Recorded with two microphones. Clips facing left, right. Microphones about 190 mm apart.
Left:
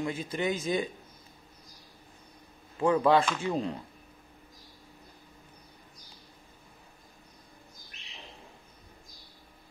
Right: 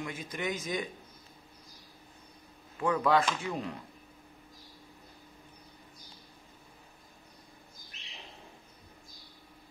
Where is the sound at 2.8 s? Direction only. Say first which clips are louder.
Left 4 dB; 30° left (ahead or behind).